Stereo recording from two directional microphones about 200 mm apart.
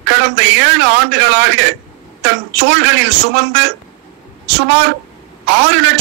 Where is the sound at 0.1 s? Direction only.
60° right (ahead or behind).